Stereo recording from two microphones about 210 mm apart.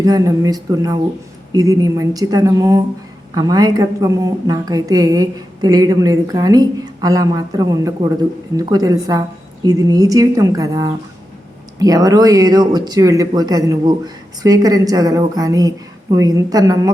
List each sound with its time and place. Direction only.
0.0 s speech: 15° right (ahead or behind)